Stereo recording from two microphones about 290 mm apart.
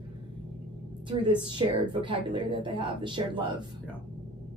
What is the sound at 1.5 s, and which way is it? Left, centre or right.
Speech, centre.